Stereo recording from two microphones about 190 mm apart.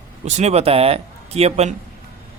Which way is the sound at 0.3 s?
35° right (ahead or behind).